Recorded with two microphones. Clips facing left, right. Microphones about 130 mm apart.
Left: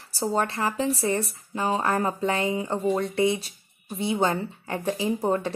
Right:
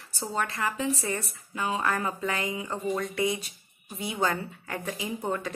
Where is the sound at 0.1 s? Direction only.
35° left (ahead or behind).